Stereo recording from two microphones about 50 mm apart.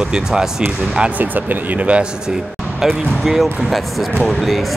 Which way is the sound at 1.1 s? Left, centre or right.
Right.